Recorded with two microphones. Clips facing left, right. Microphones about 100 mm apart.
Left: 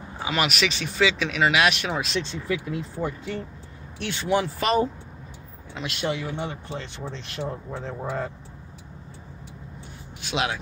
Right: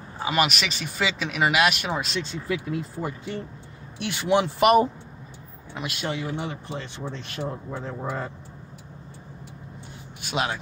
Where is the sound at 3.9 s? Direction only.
15° right (ahead or behind).